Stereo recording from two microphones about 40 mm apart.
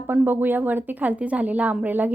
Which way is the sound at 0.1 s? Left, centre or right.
Right.